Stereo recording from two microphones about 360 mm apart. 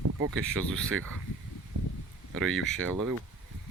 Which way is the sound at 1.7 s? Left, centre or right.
Right.